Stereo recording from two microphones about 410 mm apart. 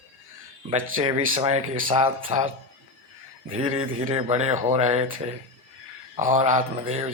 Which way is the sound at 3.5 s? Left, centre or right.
Centre.